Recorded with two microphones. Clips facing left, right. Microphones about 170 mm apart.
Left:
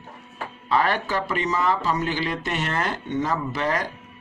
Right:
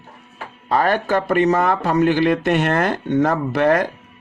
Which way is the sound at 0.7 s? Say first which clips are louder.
Right 5 dB; 45° right (ahead or behind).